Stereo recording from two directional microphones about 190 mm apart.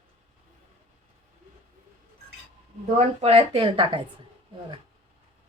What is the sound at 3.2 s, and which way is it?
Speech, 30° right (ahead or behind).